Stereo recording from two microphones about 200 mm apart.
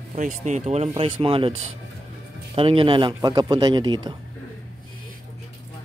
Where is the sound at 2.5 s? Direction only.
25° right (ahead or behind).